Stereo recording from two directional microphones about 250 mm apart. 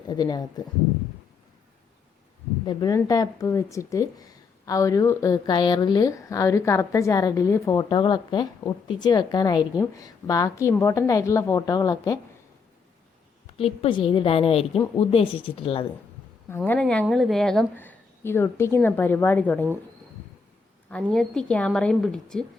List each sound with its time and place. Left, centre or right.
0.1 s speech: centre
2.6 s speech: centre
13.6 s a woman's voice: left
16.6 s speech: centre
21.0 s a woman's voice: centre